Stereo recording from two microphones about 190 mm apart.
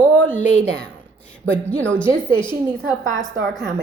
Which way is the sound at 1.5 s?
5° left (ahead or behind).